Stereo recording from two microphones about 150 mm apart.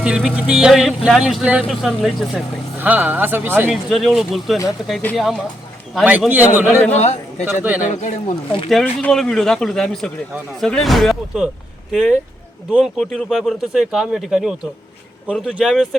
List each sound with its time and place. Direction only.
0.0 s speech: 5° right (ahead or behind)
3.7 s speech: centre (ahead or behind)
6.1 s a man's voice: 10° right (ahead or behind)
6.9 s a man's voice: 50° left (ahead or behind)
7.4 s a man's voice: 10° right (ahead or behind)
8.7 s speech: 5° left (ahead or behind)